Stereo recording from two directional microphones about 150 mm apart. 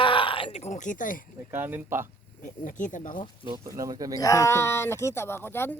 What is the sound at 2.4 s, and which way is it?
Speech, 60° left (ahead or behind).